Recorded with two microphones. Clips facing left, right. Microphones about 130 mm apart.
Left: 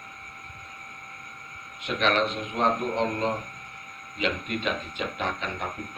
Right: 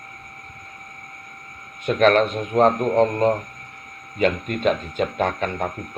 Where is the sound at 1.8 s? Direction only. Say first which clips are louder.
Right 8 dB; 45° right (ahead or behind).